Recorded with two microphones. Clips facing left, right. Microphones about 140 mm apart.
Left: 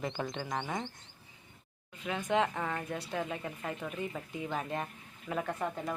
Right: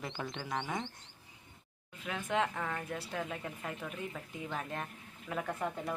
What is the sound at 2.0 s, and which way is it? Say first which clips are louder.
A woman's voice: left 3 dB; 5° left (ahead or behind).